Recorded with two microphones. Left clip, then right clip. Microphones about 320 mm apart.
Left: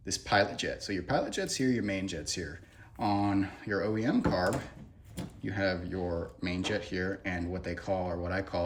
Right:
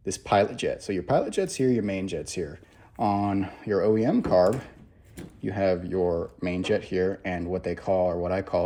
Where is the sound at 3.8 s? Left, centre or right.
Centre.